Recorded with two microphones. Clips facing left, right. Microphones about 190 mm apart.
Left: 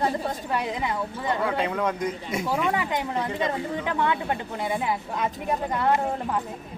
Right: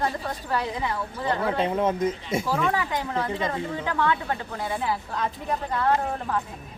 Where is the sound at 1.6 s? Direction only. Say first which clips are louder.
Right 3 dB; 25° right (ahead or behind).